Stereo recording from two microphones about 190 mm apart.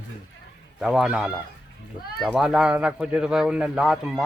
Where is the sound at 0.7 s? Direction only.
Centre (ahead or behind).